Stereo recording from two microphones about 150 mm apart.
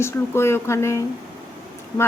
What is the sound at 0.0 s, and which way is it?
A woman's voice, 15° left (ahead or behind).